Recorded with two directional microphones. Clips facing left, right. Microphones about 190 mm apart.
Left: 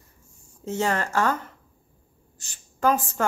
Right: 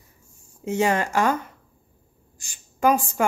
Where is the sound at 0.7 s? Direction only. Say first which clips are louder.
Right 4 dB; 15° right (ahead or behind).